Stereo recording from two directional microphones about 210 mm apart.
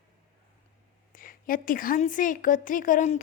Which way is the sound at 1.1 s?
40° left (ahead or behind).